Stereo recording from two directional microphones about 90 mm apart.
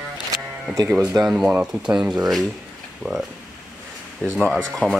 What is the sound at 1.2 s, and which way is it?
Speech, 10° right (ahead or behind).